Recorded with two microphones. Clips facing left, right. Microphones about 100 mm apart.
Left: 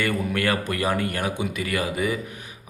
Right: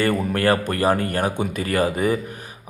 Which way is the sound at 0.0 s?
35° right (ahead or behind).